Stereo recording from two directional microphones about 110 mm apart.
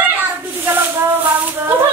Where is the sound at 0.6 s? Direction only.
20° right (ahead or behind).